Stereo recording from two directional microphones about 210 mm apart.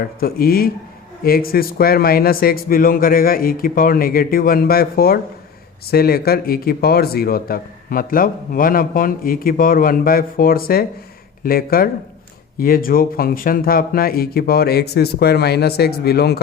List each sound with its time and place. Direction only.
0.0 s speech: 45° left (ahead or behind)